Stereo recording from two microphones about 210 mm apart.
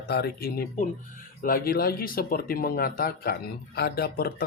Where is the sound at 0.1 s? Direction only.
50° left (ahead or behind).